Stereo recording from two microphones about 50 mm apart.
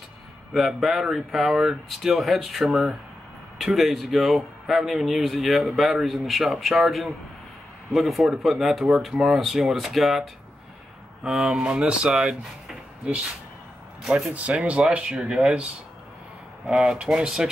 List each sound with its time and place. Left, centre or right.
0.5 s a man's voice: centre
11.6 s speech: centre
14.6 s speech: right
16.6 s speech: centre